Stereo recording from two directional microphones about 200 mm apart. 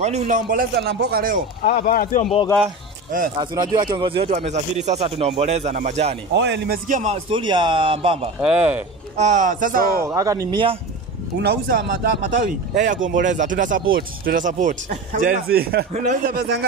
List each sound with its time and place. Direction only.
0.0 s speech: 35° right (ahead or behind)
1.7 s speech: 45° left (ahead or behind)
3.3 s speech: 20° right (ahead or behind); by 6.1 s 35° right (ahead or behind)
6.3 s speech: 60° right (ahead or behind)
6.9 s speech: 35° right (ahead or behind)
7.2 s speech: 25° right (ahead or behind)
8.4 s speech: 5° right (ahead or behind)
9.1 s speech: 35° right (ahead or behind)
10.0 s speech: 15° right (ahead or behind)
11.3 s speech: 55° right (ahead or behind)